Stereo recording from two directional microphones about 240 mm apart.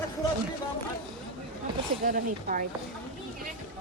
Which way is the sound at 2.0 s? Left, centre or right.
Right.